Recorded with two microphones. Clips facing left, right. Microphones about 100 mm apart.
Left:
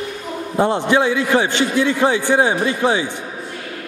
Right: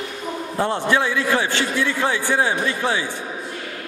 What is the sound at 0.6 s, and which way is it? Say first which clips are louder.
A man's voice: left 4 dB; 15° left (ahead or behind).